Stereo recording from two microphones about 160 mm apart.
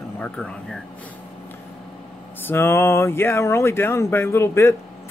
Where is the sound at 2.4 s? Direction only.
15° left (ahead or behind).